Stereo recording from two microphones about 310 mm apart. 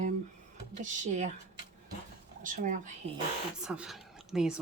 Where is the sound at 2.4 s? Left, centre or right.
Right.